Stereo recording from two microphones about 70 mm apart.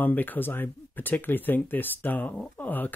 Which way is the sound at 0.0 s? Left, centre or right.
Left.